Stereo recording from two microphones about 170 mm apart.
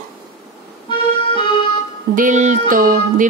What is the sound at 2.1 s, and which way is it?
Music, 50° right (ahead or behind).